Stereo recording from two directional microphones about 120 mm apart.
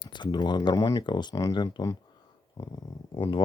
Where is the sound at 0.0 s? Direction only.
40° left (ahead or behind).